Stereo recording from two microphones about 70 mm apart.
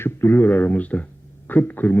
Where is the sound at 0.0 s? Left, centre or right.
Left.